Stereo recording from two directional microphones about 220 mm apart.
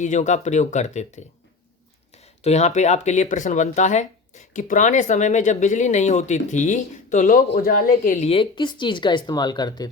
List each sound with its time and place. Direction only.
0.0 s speech: 35° left (ahead or behind)